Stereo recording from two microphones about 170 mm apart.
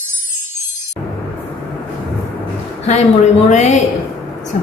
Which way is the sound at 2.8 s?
45° left (ahead or behind).